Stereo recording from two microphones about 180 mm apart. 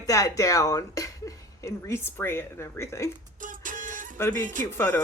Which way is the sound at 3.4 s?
45° right (ahead or behind).